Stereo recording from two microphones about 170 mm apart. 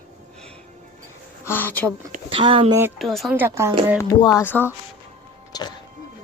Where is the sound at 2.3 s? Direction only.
30° right (ahead or behind).